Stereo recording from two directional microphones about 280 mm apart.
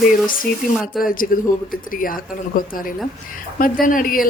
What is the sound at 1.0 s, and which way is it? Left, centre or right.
Speech, centre.